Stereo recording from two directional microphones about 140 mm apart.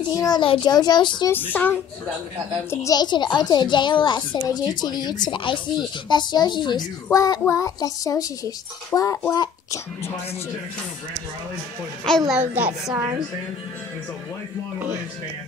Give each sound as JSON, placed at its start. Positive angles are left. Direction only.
{"t": 0.1, "sound": "a woman's voice", "side_deg": 30}
{"t": 1.3, "sound": "speech", "side_deg": 15}
{"t": 2.7, "sound": "a woman's voice", "side_deg": 25}
{"t": 12.3, "sound": "a woman's voice", "side_deg": -10}